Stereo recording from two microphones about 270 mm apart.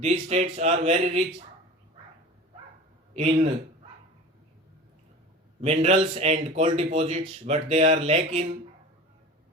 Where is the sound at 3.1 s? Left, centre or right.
Right.